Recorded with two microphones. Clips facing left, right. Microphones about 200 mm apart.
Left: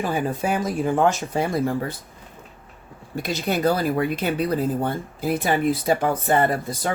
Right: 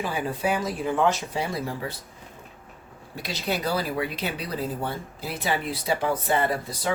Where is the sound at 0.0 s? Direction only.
50° left (ahead or behind).